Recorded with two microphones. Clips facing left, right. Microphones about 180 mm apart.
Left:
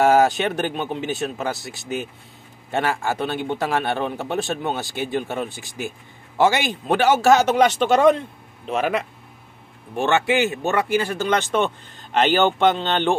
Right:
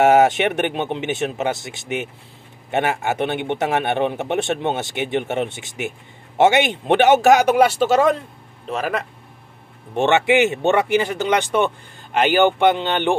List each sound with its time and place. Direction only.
0.0 s a man's voice: 20° right (ahead or behind); by 9.0 s centre (ahead or behind)
9.9 s speech: 20° right (ahead or behind)